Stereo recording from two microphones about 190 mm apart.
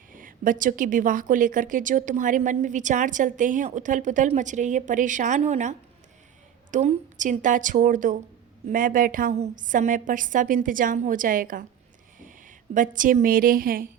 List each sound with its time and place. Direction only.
0.1 s a woman's voice: 45° right (ahead or behind)